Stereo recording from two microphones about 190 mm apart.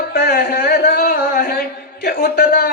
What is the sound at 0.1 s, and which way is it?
Music, 55° left (ahead or behind).